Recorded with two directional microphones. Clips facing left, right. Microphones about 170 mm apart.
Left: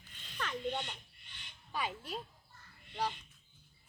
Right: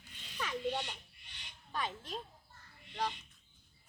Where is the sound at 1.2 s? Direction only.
55° left (ahead or behind).